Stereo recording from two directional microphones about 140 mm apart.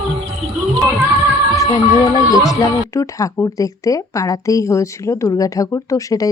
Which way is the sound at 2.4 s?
25° left (ahead or behind).